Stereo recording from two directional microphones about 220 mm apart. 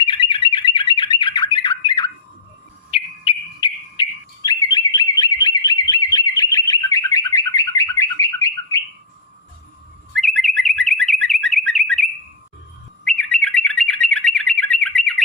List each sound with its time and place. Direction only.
0.0 s bird: 20° left (ahead or behind)
10.2 s bird: centre (ahead or behind)
11.0 s car alarm: centre (ahead or behind)
13.1 s bird: 5° left (ahead or behind)